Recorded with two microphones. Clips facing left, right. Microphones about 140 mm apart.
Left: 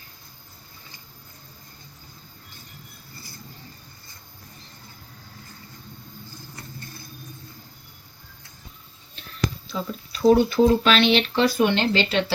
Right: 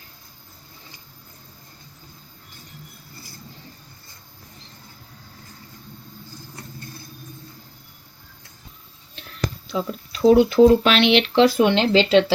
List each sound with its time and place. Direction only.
9.7 s speech: 85° right
10.5 s speech: 75° right (ahead or behind); by 12.2 s 90° right